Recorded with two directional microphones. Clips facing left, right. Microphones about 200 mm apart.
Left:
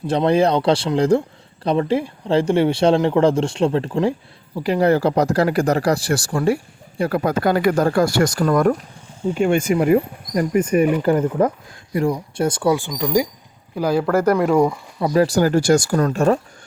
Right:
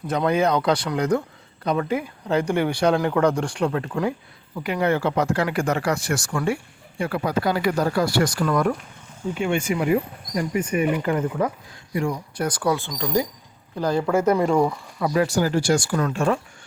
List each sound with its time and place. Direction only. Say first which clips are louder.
0.1 s speech: left 4 dB; 30° left (ahead or behind)
13.7 s speech: left 3 dB; 10° left (ahead or behind)
15.1 s speech: left 5 dB; 35° left (ahead or behind)